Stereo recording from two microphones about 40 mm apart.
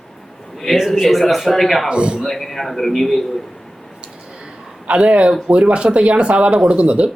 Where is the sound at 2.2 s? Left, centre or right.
Centre.